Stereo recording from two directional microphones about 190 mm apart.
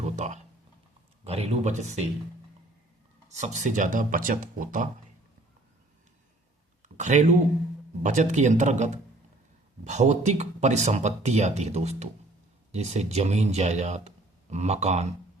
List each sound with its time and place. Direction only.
0.2 s a sound: 35° right (ahead or behind)
1.2 s speech: 35° right (ahead or behind)
3.2 s speech: 35° right (ahead or behind)
6.8 s speech: 40° right (ahead or behind)